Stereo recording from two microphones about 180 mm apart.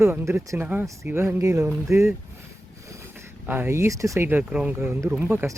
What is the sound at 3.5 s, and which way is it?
Speech, 15° right (ahead or behind).